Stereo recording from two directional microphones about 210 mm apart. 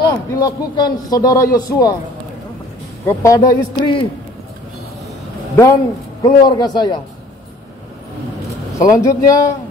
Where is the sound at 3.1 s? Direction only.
15° left (ahead or behind).